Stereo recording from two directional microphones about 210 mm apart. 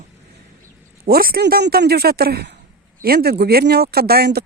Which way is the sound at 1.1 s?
45° right (ahead or behind).